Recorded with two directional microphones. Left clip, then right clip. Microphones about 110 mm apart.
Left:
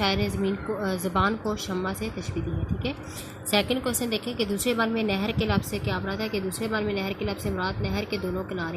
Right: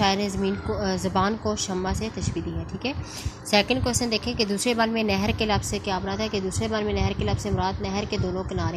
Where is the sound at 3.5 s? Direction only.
30° right (ahead or behind).